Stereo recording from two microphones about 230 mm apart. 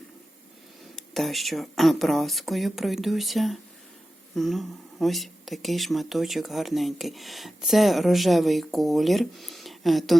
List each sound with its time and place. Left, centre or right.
0.9 s speech: centre